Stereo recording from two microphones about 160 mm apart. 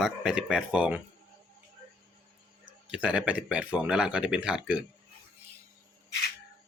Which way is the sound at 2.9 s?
5° right (ahead or behind).